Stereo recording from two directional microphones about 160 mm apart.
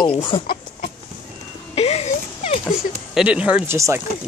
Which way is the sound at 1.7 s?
40° left (ahead or behind).